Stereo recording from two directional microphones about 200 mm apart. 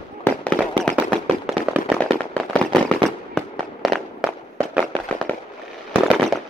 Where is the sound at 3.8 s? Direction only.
Centre (ahead or behind).